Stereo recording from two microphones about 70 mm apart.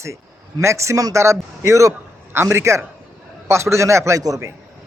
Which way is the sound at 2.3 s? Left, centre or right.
Right.